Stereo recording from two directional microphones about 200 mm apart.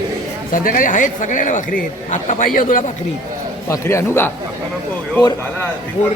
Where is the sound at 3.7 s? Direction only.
15° left (ahead or behind).